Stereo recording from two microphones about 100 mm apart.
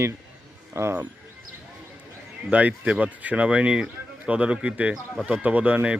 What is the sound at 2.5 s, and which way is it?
Speech, 15° right (ahead or behind).